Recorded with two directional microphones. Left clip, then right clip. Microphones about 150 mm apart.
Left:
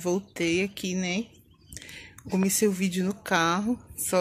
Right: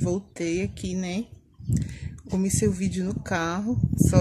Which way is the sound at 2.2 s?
Centre (ahead or behind).